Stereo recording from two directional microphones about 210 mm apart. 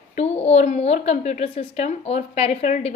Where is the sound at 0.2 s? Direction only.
30° left (ahead or behind).